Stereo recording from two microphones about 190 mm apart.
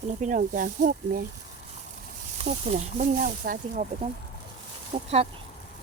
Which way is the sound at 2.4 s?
40° right (ahead or behind).